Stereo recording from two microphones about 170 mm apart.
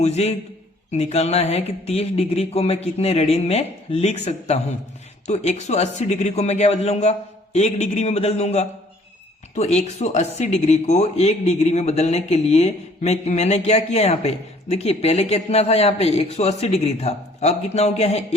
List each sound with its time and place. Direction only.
0.0 s speech: 40° left (ahead or behind)